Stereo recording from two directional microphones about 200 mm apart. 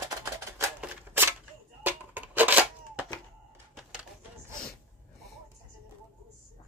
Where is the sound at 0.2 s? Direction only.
15° right (ahead or behind).